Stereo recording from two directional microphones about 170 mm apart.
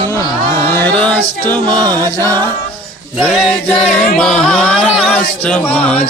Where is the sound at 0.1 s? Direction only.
15° left (ahead or behind).